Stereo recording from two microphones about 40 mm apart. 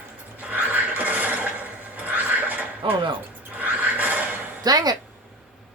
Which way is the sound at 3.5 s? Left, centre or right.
Right.